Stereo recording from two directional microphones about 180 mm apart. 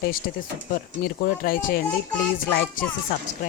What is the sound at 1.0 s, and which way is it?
Speech, 50° left (ahead or behind).